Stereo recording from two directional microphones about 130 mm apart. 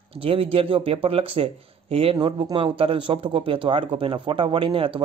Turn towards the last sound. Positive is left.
turn(degrees=-40)  # may be behind; listen again after turning